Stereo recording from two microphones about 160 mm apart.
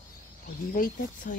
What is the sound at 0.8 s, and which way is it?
Speech, 55° left (ahead or behind).